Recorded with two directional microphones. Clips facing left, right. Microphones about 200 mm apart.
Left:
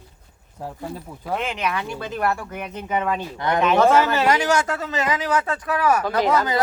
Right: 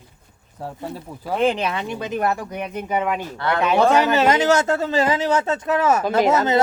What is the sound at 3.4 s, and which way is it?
Speech, 15° left (ahead or behind).